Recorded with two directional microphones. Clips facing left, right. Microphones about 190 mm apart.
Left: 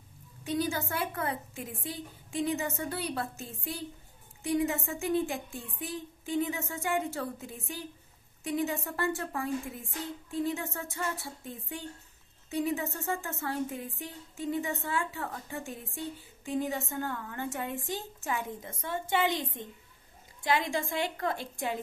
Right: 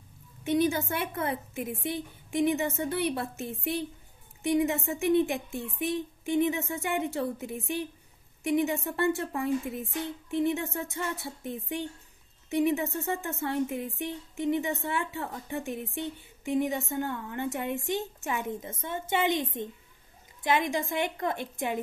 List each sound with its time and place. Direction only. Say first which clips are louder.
0.4 s a woman's voice: right 5 dB; 20° right (ahead or behind)
8.8 s a woman's voice: right 5 dB; 20° right (ahead or behind)